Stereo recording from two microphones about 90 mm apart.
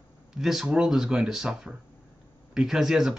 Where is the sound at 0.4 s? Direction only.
5° right (ahead or behind).